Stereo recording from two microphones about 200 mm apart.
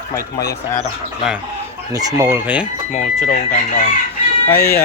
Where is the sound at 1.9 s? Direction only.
20° right (ahead or behind).